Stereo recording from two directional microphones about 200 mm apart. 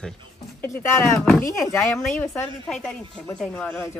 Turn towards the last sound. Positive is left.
turn(degrees=5)  # may be behind; listen again after turning